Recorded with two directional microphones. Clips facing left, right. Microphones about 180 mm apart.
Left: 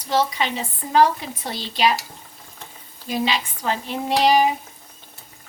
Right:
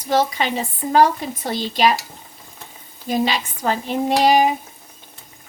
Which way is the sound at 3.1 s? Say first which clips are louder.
Right 3 dB; 45° right (ahead or behind).